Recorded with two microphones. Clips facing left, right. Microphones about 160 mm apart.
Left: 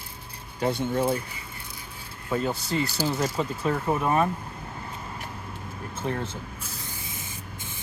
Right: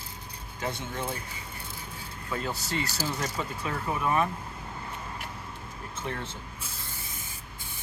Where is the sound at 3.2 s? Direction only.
35° left (ahead or behind).